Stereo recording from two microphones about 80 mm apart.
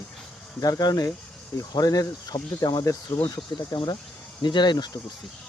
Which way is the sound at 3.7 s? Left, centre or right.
Left.